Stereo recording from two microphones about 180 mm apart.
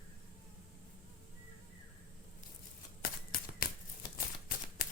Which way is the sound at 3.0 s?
55° left (ahead or behind).